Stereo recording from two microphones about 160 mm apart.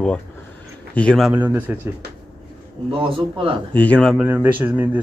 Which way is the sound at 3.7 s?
10° left (ahead or behind).